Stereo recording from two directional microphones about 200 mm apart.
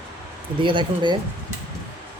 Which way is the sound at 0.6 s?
25° right (ahead or behind).